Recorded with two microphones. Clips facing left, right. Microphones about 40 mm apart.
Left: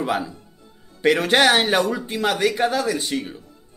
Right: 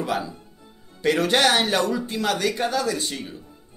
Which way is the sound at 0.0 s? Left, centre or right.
Left.